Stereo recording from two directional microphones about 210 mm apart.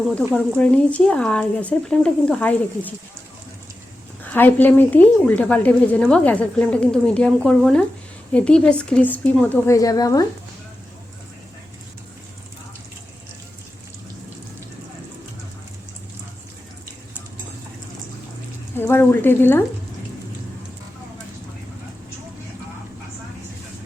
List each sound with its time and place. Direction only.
0.3 s a woman's voice: 5° left (ahead or behind)
4.2 s a woman's voice: 10° left (ahead or behind)
18.8 s a woman's voice: 10° left (ahead or behind)